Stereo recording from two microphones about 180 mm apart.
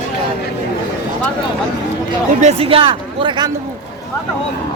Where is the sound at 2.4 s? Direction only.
35° right (ahead or behind).